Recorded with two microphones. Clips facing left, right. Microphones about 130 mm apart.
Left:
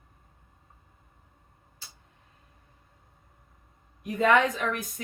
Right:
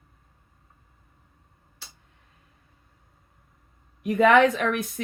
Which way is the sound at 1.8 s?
70° right (ahead or behind).